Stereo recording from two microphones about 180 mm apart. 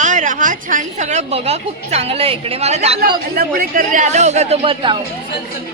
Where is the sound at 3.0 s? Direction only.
55° right (ahead or behind); by 4.9 s 30° right (ahead or behind).